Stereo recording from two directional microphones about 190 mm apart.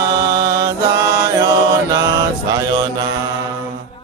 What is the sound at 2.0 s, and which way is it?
Mantra, 20° right (ahead or behind).